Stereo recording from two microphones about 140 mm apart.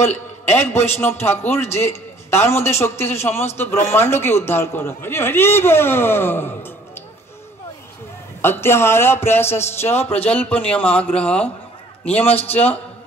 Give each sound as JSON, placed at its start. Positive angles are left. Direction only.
{"t": 0.7, "sound": "a man's voice", "side_deg": 15}
{"t": 8.4, "sound": "a man's voice", "side_deg": 15}
{"t": 12.3, "sound": "a man's voice", "side_deg": 45}